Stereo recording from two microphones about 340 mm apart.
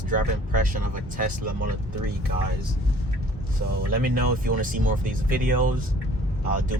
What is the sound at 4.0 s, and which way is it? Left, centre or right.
Speech, right.